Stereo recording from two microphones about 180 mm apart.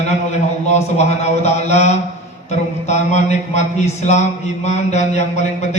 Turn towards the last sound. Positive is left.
turn(degrees=40)  # may be behind; listen again after turning